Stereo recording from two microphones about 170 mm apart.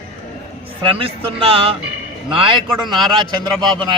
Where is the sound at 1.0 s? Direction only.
35° right (ahead or behind).